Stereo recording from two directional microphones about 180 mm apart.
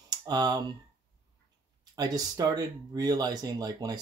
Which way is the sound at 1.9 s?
20° right (ahead or behind).